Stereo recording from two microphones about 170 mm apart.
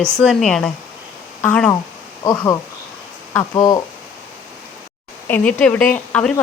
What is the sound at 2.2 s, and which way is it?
Speech, 20° left (ahead or behind).